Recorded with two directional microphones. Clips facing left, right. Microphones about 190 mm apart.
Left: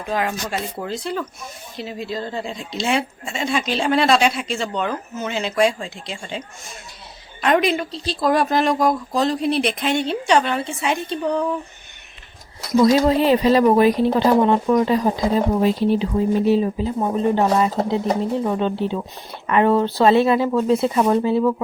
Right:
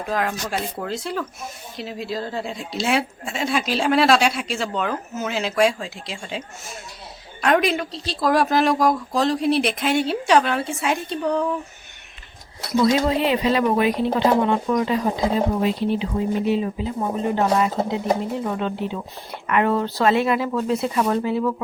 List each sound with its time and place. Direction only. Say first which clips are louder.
0.0 s speech: left 1 dB; centre (ahead or behind)
7.4 s speech: left 1 dB; centre (ahead or behind)
12.8 s speech: left 4 dB; 40° left (ahead or behind)